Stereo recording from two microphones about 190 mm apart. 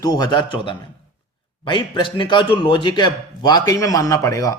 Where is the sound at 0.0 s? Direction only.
20° left (ahead or behind).